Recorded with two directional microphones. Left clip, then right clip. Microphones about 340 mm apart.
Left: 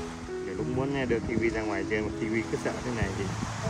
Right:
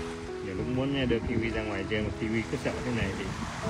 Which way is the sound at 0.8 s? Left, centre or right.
Centre.